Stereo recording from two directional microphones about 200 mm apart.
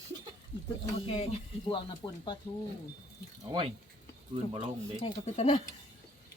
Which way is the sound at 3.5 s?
25° right (ahead or behind).